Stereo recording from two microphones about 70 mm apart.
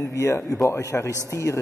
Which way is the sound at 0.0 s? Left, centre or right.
Left.